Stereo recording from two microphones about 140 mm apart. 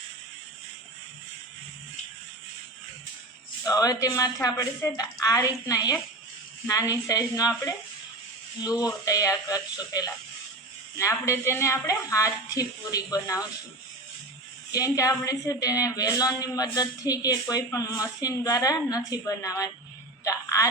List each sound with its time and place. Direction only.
3.6 s a woman's voice: 25° left (ahead or behind)
14.7 s a woman's voice: 25° left (ahead or behind)
20.2 s telephone: 25° left (ahead or behind)